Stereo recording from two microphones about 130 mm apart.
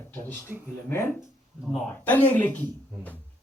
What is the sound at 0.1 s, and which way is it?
Speech, 15° left (ahead or behind).